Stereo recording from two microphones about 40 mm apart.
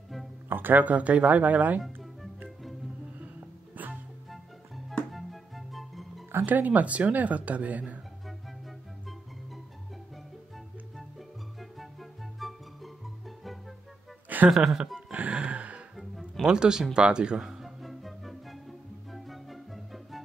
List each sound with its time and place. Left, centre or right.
0.5 s music: right
0.8 s speech: right
3.2 s music: right
4.3 s music: centre
6.4 s speech: right
11.8 s music: centre
14.3 s a sound: right
15.1 s music: right
16.3 s speech: centre
17.4 s music: centre